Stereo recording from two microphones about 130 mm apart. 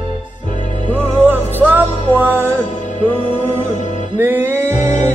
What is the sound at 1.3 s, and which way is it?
Music, 15° right (ahead or behind).